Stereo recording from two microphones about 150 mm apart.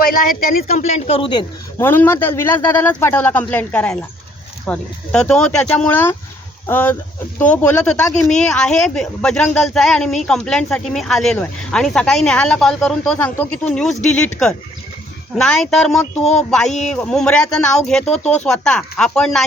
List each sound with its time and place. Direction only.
0.0 s a woman's voice: 65° left (ahead or behind); by 1.5 s 35° left (ahead or behind)
1.8 s speech: 15° left (ahead or behind)